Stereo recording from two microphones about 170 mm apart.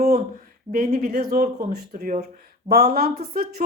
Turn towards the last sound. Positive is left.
turn(degrees=-60)  # may be behind; listen again after turning